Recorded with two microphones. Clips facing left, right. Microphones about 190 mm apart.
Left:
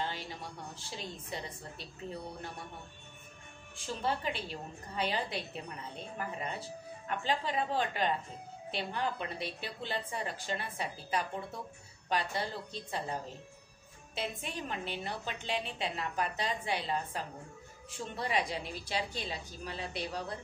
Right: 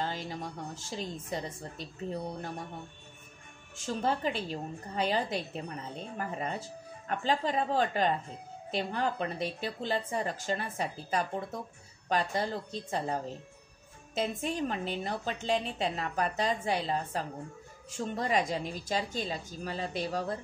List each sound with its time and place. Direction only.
0.0 s a woman's voice: 40° right (ahead or behind)
3.7 s a woman's voice: 45° right (ahead or behind)